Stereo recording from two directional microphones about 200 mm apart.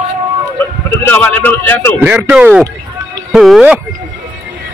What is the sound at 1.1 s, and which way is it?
Speech, 10° left (ahead or behind).